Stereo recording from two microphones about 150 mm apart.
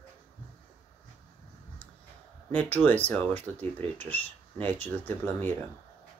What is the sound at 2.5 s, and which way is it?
Speech, 10° left (ahead or behind).